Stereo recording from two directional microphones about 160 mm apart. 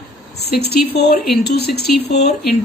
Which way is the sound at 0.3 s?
90° left.